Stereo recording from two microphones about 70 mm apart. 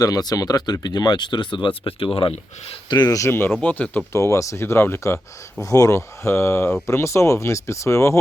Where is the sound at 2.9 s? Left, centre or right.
Left.